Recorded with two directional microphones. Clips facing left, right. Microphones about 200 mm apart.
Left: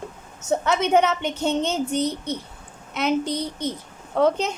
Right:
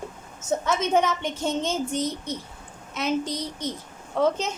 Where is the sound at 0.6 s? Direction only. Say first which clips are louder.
Left 3 dB; 65° left (ahead or behind).